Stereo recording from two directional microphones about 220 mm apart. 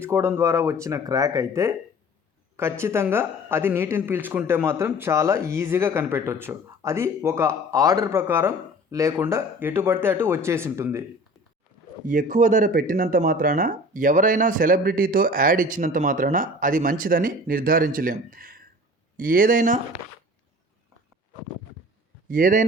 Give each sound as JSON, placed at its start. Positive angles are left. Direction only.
{"t": 0.0, "sound": "speech", "side_deg": -10}
{"t": 12.0, "sound": "speech", "side_deg": -35}
{"t": 22.3, "sound": "speech", "side_deg": -40}